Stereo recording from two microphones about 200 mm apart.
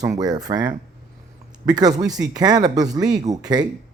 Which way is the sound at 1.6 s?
20° right (ahead or behind).